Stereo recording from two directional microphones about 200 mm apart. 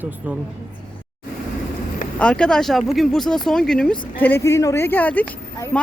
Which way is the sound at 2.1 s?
5° left (ahead or behind).